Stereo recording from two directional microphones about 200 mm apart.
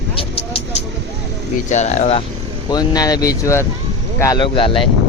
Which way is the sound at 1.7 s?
35° left (ahead or behind).